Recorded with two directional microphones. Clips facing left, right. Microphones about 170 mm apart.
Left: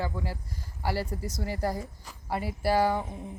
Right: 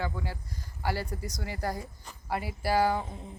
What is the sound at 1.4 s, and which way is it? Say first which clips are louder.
Speech: left 4 dB; 30° left (ahead or behind).